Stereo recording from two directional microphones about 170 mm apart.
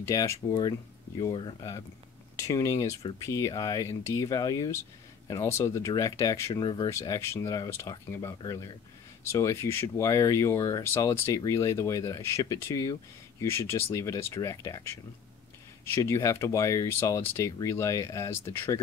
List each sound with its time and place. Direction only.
0.0 s speech: 20° left (ahead or behind)